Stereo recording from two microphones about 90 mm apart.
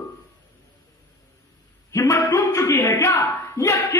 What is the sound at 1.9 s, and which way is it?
A man's voice, 35° left (ahead or behind).